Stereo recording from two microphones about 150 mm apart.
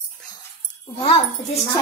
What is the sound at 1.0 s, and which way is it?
Speech, 35° left (ahead or behind).